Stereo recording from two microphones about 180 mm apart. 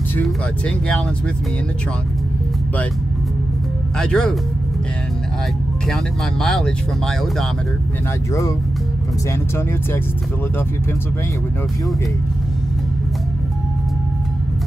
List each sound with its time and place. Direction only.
0.7 s speech: 5° left (ahead or behind)
4.0 s speech: 5° left (ahead or behind)
6.4 s speech: centre (ahead or behind)
8.3 s speech: 20° left (ahead or behind)